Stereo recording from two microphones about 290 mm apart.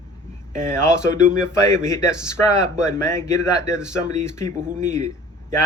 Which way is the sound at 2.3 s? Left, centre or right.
Centre.